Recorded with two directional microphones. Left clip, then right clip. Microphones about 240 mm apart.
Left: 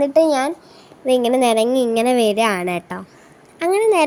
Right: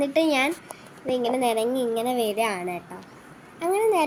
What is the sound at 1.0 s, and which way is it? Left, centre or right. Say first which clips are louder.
A woman's voice: left 8 dB; left.